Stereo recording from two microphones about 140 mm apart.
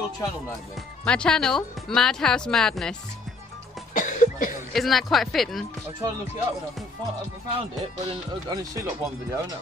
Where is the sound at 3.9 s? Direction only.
65° left (ahead or behind).